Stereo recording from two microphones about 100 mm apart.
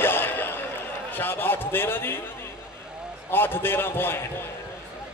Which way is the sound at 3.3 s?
20° left (ahead or behind).